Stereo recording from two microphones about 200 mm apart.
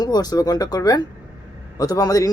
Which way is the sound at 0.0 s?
20° left (ahead or behind).